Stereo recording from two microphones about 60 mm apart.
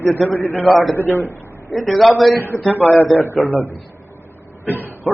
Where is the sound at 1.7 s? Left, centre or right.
Centre.